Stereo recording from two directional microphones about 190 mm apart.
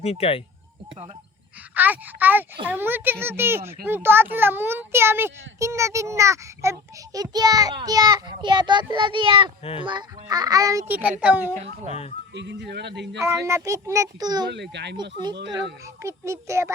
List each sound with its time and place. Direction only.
0.0 s speech: 30° left (ahead or behind)
1.7 s a child's voice: 10° right (ahead or behind)
12.3 s speech: 65° right (ahead or behind)
13.2 s a child's voice: 15° right (ahead or behind)
14.5 s speech: 65° right (ahead or behind)
16.0 s a child's voice: 15° right (ahead or behind)